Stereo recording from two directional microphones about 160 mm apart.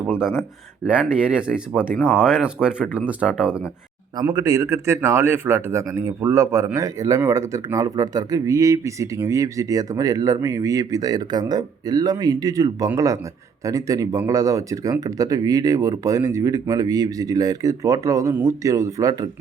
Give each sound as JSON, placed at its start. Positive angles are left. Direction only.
{"t": 0.1, "sound": "speech", "side_deg": -5}
{"t": 4.2, "sound": "speech", "side_deg": -25}